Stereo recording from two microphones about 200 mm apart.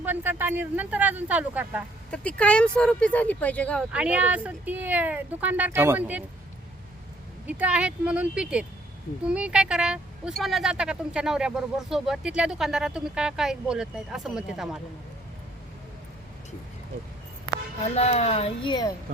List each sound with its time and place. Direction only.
0.0 s speech: 10° right (ahead or behind)
2.0 s speech: 5° left (ahead or behind)
3.9 s speech: 5° right (ahead or behind)
7.4 s speech: 5° right (ahead or behind)
17.9 s speech: 30° left (ahead or behind)